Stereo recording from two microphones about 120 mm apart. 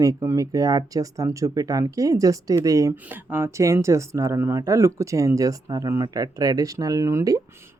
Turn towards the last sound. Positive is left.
turn(degrees=-25)  # may be behind; listen again after turning